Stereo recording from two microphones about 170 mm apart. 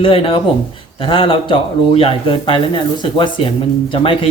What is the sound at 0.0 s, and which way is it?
Speech, 30° left (ahead or behind).